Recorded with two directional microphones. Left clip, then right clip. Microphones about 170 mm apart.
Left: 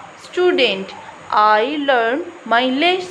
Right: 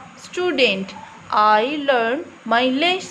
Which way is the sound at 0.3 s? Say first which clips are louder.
Left 3 dB; 25° right (ahead or behind).